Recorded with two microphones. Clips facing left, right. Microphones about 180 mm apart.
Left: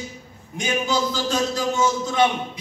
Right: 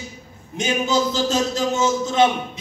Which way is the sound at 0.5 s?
25° right (ahead or behind).